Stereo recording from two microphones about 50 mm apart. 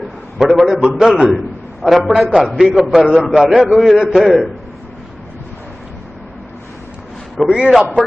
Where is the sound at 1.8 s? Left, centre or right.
Centre.